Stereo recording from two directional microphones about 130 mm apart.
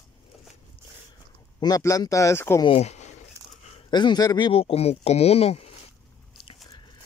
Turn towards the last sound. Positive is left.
turn(degrees=50)  # may be behind; listen again after turning